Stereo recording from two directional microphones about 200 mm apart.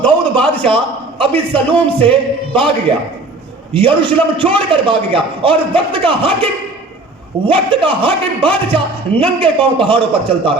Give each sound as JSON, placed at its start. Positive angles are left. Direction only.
{"t": 0.0, "sound": "a sound", "side_deg": 5}
{"t": 1.5, "sound": "a man's voice", "side_deg": -25}
{"t": 3.8, "sound": "a man's voice", "side_deg": -25}